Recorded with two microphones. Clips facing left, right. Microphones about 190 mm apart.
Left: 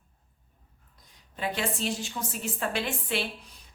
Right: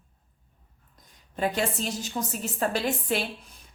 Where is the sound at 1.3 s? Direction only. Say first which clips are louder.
Right 4 dB; 45° right (ahead or behind).